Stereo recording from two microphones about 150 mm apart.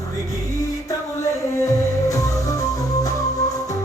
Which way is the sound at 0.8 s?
20° left (ahead or behind).